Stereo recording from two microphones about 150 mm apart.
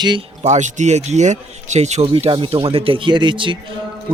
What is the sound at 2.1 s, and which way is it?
A man's voice, 35° right (ahead or behind).